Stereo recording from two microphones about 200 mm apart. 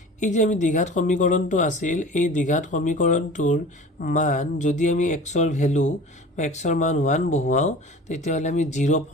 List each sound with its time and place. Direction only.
0.2 s speech: 40° left (ahead or behind)